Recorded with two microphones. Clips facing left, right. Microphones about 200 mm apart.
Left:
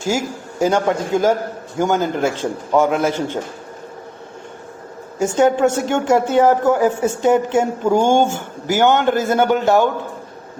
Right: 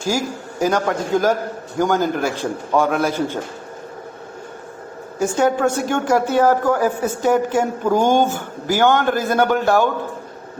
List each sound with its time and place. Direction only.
0.0 s a man's voice: 20° left (ahead or behind)
5.2 s speech: 25° left (ahead or behind)